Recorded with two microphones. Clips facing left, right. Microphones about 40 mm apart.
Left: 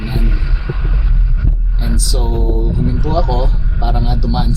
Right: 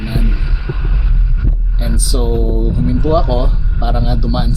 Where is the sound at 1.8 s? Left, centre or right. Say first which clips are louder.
Right 2 dB; centre.